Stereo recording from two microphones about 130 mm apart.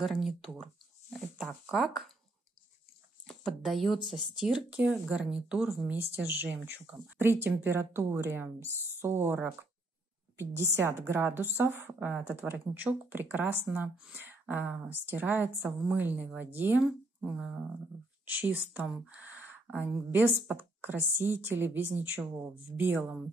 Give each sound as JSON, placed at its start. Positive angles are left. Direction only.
{"t": 0.0, "sound": "speech", "side_deg": -5}
{"t": 3.3, "sound": "a woman's voice", "side_deg": 0}